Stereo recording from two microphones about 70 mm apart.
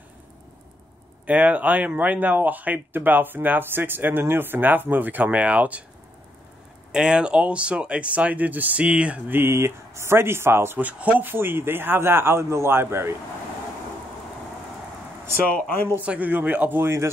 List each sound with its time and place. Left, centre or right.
1.2 s speech: right
6.9 s speech: centre
9.3 s speech: right
10.8 s speech: centre; by 13.1 s right
15.7 s a man's voice: left
16.1 s speech: right